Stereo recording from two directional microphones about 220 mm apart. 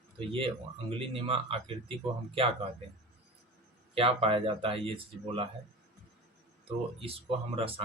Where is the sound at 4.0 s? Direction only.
25° right (ahead or behind).